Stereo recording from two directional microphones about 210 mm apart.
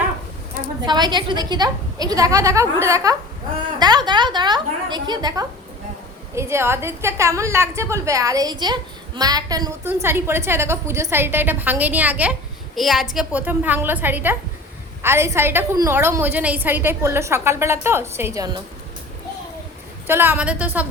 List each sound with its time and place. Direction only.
0.9 s a woman's voice: 20° right (ahead or behind)
20.1 s a woman's voice: 10° right (ahead or behind)